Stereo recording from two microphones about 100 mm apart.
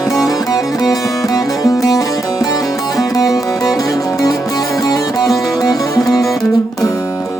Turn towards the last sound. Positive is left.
turn(degrees=0)  # may be behind; listen again after turning